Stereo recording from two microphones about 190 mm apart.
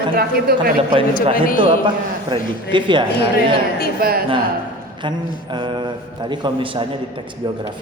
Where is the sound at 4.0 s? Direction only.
55° right (ahead or behind).